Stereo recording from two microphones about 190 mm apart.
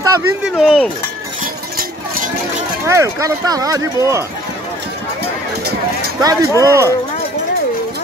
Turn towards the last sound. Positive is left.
turn(degrees=-15)  # may be behind; listen again after turning